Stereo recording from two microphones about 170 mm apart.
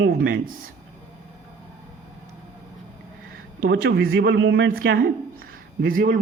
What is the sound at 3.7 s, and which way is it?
Speech, 80° right.